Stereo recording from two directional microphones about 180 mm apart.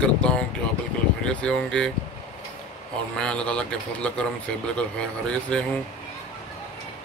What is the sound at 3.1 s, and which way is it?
Speech, 5° left (ahead or behind).